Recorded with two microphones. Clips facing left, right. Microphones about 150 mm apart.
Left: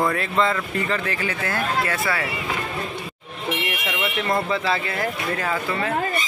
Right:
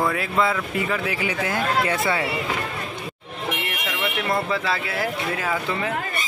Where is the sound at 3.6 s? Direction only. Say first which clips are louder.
Left 1 dB; centre (ahead or behind).